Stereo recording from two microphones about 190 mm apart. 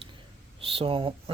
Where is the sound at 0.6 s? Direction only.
30° right (ahead or behind).